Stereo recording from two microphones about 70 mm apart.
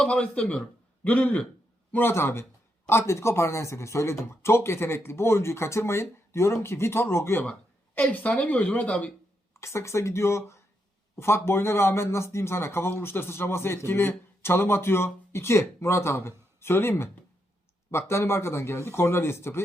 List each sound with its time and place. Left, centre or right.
0.0 s a man's voice: centre
1.9 s speech: left
7.9 s speech: left
9.6 s speech: left